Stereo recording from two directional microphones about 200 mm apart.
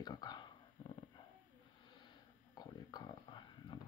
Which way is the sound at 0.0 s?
20° left (ahead or behind).